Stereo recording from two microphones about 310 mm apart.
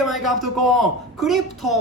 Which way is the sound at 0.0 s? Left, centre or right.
Centre.